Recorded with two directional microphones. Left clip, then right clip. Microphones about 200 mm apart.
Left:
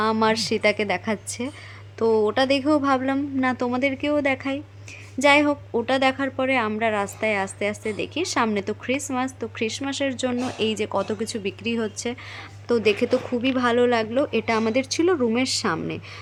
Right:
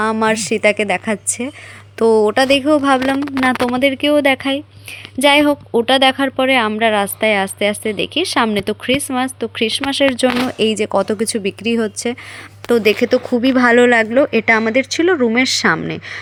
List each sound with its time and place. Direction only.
0.0 s speech: 20° right (ahead or behind)
12.6 s speech: 20° right (ahead or behind)